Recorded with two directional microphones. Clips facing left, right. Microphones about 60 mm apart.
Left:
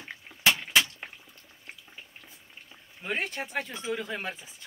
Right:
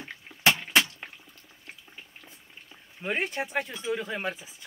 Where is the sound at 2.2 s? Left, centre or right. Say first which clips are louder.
Right 1 dB; centre.